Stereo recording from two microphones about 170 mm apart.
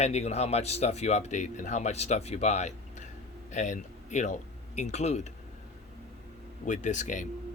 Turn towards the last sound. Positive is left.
turn(degrees=45)  # may be behind; listen again after turning